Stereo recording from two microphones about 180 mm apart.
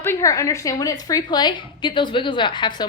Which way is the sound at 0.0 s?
15° left (ahead or behind).